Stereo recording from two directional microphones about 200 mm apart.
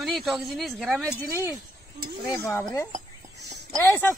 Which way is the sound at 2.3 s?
15° left (ahead or behind).